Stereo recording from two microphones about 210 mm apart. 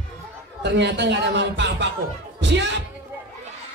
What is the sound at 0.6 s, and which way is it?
Speech, 55° right (ahead or behind).